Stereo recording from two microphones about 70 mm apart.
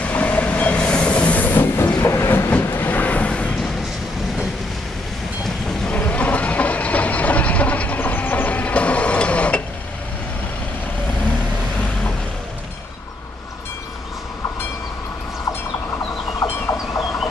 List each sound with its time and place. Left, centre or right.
0.0 s train: left
5.4 s thunder: centre
5.9 s train: left